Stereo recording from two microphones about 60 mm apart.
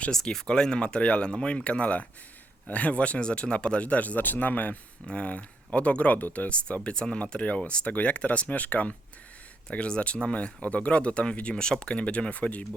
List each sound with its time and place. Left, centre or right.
0.1 s speech: centre; by 12.6 s left